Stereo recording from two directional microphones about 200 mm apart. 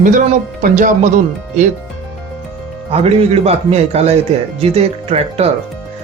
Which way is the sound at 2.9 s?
30° right (ahead or behind).